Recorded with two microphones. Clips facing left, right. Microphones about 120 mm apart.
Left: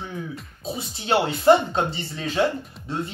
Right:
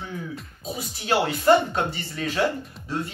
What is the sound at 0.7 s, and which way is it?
Speech, 25° left (ahead or behind).